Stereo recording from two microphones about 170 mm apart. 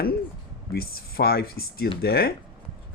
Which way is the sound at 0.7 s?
65° left (ahead or behind).